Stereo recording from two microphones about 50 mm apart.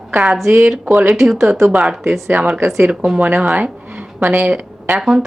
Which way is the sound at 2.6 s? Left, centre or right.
Right.